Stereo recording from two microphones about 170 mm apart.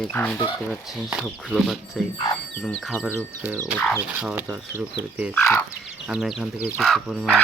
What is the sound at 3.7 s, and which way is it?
Speech, 10° left (ahead or behind).